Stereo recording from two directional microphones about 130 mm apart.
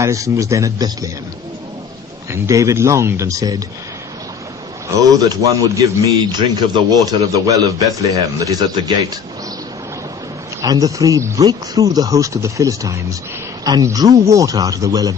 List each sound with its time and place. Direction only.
0.0 s speech: 25° right (ahead or behind)
2.3 s speech: 25° right (ahead or behind)
4.9 s speech: 20° right (ahead or behind)
10.6 s speech: 30° right (ahead or behind)